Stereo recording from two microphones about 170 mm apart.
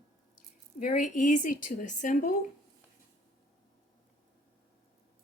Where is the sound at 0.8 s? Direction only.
50° left (ahead or behind).